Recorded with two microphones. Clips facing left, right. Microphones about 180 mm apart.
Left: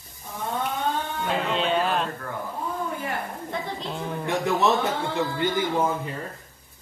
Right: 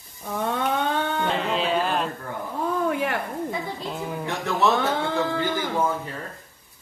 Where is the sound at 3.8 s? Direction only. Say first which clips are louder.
Right 1 dB; 5° right (ahead or behind).